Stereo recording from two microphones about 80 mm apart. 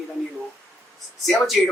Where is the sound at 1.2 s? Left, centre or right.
Centre.